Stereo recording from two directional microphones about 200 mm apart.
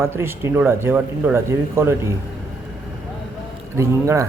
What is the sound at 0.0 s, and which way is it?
Speech, 15° right (ahead or behind).